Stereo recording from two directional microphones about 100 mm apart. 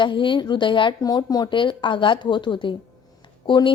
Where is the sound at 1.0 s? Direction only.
45° left (ahead or behind).